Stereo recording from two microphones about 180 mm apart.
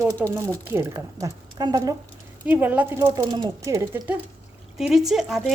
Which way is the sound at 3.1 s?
25° right (ahead or behind).